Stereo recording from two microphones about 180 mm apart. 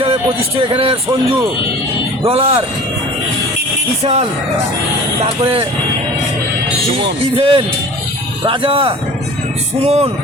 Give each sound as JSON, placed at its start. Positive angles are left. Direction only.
{"t": 0.0, "sound": "speech", "side_deg": -30}
{"t": 4.0, "sound": "speech", "side_deg": -35}
{"t": 7.0, "sound": "speech", "side_deg": -30}